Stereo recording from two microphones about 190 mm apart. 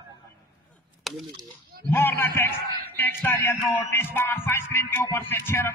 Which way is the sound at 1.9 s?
10° left (ahead or behind).